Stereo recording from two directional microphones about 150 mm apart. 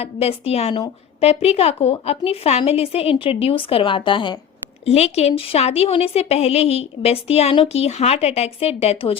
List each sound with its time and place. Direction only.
0.0 s a woman's voice: 40° left (ahead or behind)
4.9 s a woman's voice: 45° left (ahead or behind)